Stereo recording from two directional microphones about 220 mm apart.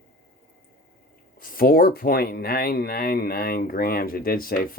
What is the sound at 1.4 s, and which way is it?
Speech, 40° left (ahead or behind).